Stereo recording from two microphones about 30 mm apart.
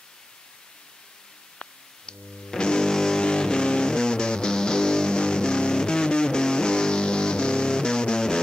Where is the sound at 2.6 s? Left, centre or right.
Left.